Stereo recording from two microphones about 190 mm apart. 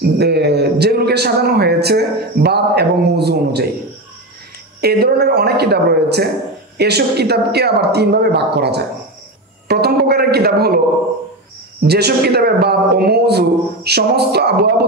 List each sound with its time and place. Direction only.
0.0 s a man's voice: 60° right (ahead or behind)
4.8 s a man's voice: 55° right (ahead or behind)
11.8 s a man's voice: 60° right (ahead or behind)